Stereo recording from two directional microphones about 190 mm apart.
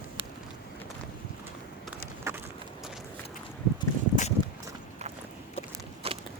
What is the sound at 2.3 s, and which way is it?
Clip-clop, 15° right (ahead or behind).